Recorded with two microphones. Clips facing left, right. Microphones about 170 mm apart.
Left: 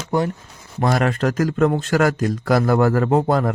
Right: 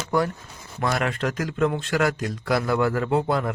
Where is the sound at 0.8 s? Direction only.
40° left (ahead or behind).